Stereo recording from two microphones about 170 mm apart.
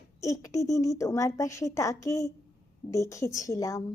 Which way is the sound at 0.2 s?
20° left (ahead or behind).